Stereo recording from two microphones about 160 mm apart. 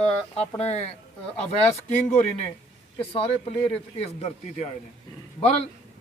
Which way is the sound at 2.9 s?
35° left (ahead or behind).